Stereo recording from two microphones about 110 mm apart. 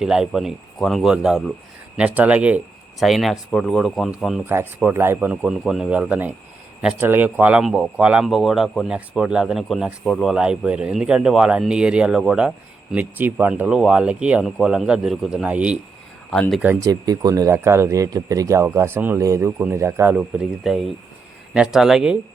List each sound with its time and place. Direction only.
0.0 s speech: 5° right (ahead or behind)
3.0 s speech: centre (ahead or behind)
4.4 s speech: 20° right (ahead or behind)
16.3 s speech: 5° left (ahead or behind)
16.8 s speech: 35° right (ahead or behind); by 22.2 s 5° right (ahead or behind)